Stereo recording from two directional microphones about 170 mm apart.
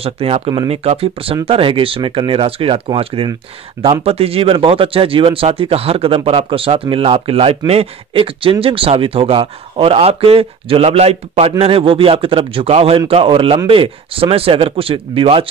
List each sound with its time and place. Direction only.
0.0 s speech: 35° right (ahead or behind)